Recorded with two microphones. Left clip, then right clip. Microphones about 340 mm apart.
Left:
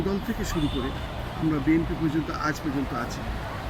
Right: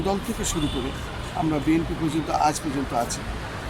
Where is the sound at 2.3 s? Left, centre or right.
Centre.